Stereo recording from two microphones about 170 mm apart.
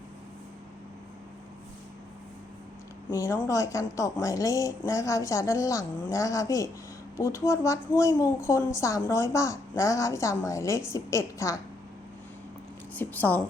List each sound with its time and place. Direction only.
3.1 s a woman's voice: 20° left (ahead or behind)
12.9 s a woman's voice: 10° left (ahead or behind)